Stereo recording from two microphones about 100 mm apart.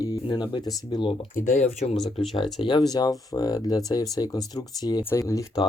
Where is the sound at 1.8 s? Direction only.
90° left.